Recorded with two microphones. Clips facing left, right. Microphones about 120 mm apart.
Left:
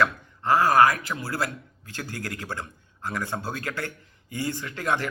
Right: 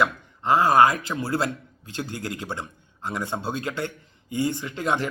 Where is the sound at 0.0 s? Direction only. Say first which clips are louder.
Even; 20° right (ahead or behind).